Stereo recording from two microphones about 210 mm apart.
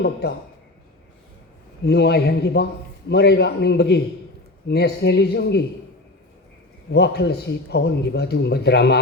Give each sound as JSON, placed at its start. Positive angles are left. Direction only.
{"t": 0.0, "sound": "a man's voice", "side_deg": 55}
{"t": 1.8, "sound": "a man's voice", "side_deg": 50}
{"t": 6.9, "sound": "a man's voice", "side_deg": 55}